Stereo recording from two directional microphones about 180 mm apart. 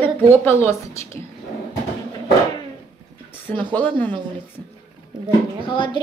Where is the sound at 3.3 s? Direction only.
10° left (ahead or behind).